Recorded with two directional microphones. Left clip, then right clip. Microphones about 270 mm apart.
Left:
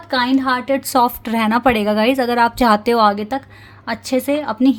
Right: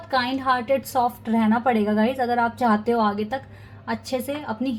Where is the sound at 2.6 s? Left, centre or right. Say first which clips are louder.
Left 8 dB; left.